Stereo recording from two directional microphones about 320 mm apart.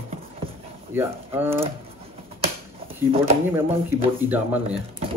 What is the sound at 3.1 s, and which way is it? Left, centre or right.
Speech, centre.